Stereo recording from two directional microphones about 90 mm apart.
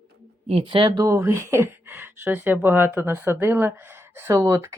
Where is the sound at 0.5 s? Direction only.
65° right (ahead or behind).